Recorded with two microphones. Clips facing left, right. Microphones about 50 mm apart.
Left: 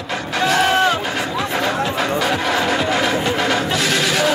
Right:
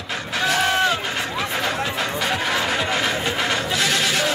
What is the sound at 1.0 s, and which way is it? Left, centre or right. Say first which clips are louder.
Music: left 3 dB; centre.